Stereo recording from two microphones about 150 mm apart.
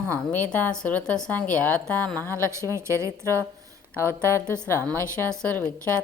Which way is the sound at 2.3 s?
20° right (ahead or behind).